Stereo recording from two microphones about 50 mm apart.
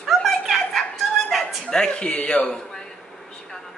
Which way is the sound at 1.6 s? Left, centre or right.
Centre.